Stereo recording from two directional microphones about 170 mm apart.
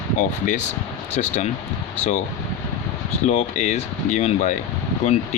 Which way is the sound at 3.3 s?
40° left (ahead or behind).